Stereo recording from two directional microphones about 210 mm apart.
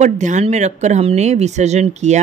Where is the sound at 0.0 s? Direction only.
35° right (ahead or behind).